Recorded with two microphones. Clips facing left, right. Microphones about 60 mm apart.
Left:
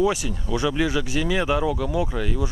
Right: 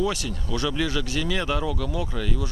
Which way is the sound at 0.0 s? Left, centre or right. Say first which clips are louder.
Left 4 dB; centre.